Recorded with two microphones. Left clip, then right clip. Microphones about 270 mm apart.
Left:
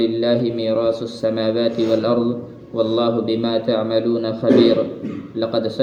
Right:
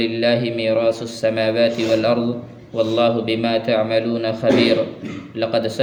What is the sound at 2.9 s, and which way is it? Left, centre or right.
A man's voice, right.